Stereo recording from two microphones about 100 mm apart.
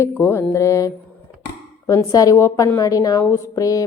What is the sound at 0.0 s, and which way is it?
A woman's voice, 25° left (ahead or behind).